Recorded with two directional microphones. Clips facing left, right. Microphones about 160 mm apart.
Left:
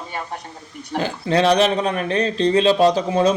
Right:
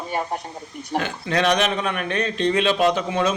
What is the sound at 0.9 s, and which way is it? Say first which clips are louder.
Speech: left 4 dB; 30° left (ahead or behind).